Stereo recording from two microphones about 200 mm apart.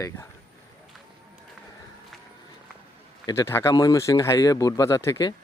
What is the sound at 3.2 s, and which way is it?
Speech, 15° left (ahead or behind).